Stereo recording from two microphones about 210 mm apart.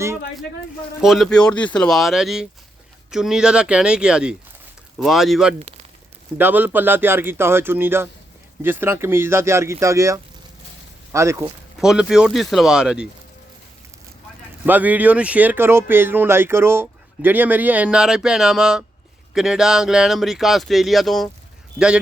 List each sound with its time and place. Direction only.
1.0 s speech: centre (ahead or behind)
5.5 s speech: 30° right (ahead or behind)
6.3 s speech: 10° right (ahead or behind)
11.8 s speech: centre (ahead or behind)
14.7 s speech: 5° right (ahead or behind)